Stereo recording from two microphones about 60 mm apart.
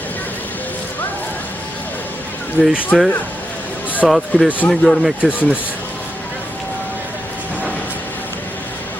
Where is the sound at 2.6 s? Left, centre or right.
Left.